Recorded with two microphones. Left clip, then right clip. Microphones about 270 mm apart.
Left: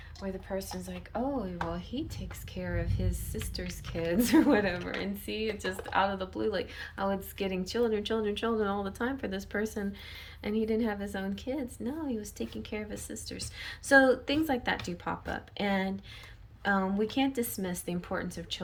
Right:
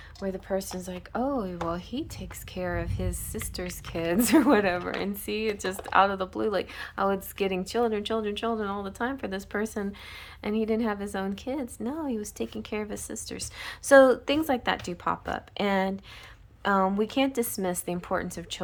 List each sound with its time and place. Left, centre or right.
0.2 s a woman's voice: right